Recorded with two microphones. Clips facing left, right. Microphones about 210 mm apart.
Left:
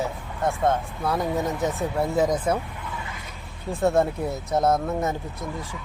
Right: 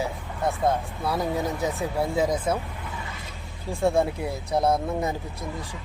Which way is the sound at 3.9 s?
10° right (ahead or behind).